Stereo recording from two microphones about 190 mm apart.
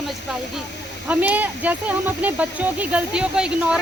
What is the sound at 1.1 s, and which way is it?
Speech, 10° right (ahead or behind).